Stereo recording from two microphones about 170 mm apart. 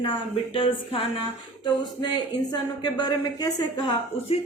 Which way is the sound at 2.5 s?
25° left (ahead or behind).